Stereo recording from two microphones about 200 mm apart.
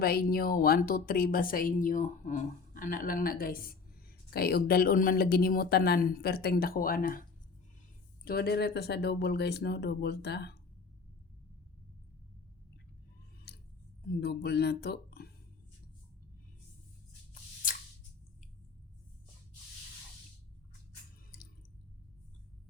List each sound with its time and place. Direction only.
0.0 s speech: 50° left (ahead or behind)
8.2 s speech: 50° left (ahead or behind)
14.2 s speech: 55° left (ahead or behind)